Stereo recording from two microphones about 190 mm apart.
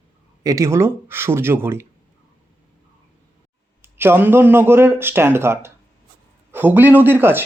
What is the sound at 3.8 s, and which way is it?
Speech, 10° right (ahead or behind).